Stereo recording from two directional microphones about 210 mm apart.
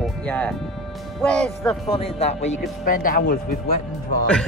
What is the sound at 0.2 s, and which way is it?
Speech, 5° left (ahead or behind).